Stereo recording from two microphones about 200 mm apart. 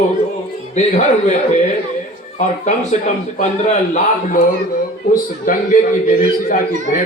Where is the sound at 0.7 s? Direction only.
35° left (ahead or behind).